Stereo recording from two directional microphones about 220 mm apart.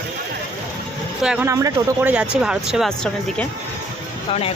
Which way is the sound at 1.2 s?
5° right (ahead or behind).